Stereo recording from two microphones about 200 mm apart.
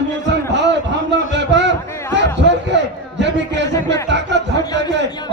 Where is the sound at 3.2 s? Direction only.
60° right (ahead or behind).